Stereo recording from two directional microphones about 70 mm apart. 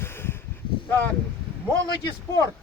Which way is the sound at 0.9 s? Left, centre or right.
Left.